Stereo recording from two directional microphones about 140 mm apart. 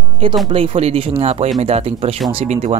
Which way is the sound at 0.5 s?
45° right (ahead or behind).